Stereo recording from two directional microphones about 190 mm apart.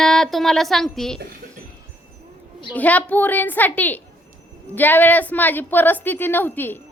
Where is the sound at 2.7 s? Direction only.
10° left (ahead or behind).